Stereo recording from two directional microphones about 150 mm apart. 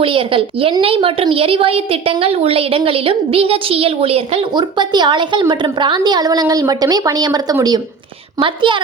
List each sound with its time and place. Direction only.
0.0 s a woman's voice: 35° right (ahead or behind)
4.5 s a woman's voice: 30° right (ahead or behind)